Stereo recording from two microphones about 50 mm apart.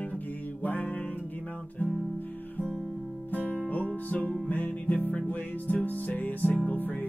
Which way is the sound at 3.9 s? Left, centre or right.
Left.